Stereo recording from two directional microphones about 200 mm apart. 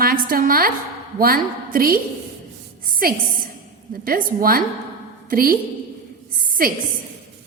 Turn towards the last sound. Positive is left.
turn(degrees=-45)  # may be behind; listen again after turning